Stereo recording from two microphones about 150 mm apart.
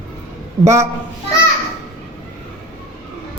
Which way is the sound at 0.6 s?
20° right (ahead or behind).